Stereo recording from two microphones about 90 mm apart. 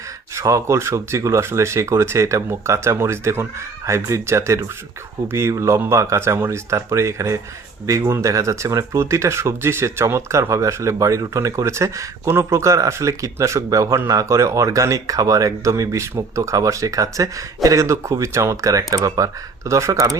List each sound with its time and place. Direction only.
0.3 s speech: 35° right (ahead or behind)